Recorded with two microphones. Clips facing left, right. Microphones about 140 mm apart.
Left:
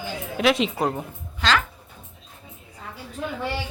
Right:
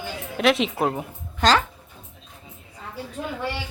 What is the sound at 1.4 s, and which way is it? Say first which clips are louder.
Speech: right 4 dB; 45° right (ahead or behind).